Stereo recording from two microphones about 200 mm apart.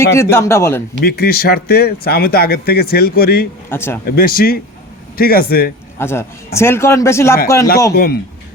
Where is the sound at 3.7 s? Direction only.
10° left (ahead or behind).